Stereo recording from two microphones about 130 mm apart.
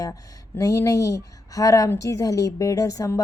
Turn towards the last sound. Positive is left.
turn(degrees=25)  # may be behind; listen again after turning